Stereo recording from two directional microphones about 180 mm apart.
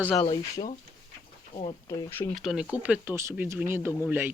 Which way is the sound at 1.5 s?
30° left (ahead or behind).